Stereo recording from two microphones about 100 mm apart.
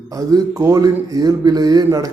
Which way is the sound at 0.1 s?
35° right (ahead or behind).